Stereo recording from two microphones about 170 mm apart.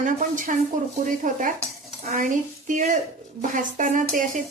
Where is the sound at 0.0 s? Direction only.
50° right (ahead or behind).